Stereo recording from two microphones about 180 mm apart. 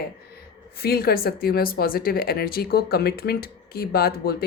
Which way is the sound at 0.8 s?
60° left (ahead or behind).